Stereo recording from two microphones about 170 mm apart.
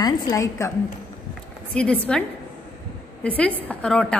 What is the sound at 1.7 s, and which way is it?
Speech, 5° left (ahead or behind).